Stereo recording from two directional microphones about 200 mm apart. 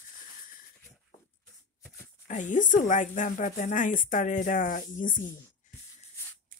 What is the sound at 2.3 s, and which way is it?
Speech, 40° left (ahead or behind).